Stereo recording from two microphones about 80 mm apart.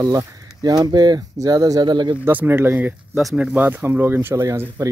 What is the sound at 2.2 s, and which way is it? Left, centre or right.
Speech, right.